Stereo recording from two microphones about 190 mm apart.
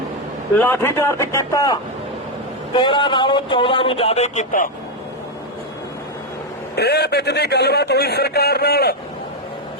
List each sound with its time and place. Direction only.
0.5 s a man's voice: 10° left (ahead or behind); by 4.7 s 40° left (ahead or behind)
6.7 s a man's voice: 60° left (ahead or behind)